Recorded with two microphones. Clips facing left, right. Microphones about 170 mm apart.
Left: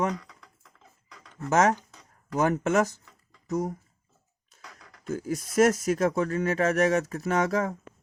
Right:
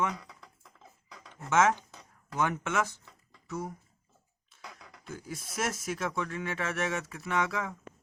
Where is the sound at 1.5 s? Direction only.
40° left (ahead or behind).